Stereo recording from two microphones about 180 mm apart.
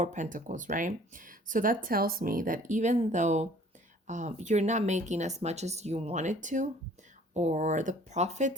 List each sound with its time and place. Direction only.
0.0 s speech: 45° right (ahead or behind)